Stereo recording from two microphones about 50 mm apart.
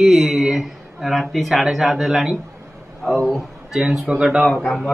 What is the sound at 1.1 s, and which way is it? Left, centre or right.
Speech, centre.